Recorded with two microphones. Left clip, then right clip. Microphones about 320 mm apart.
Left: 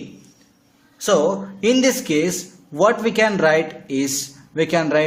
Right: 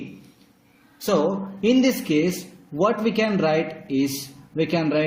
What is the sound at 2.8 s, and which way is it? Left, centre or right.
Speech, left.